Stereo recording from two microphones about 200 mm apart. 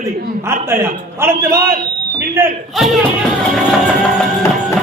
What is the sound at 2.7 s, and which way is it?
Music, centre (ahead or behind).